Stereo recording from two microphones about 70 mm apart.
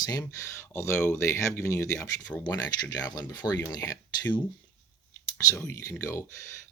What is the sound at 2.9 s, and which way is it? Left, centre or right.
Speech, left.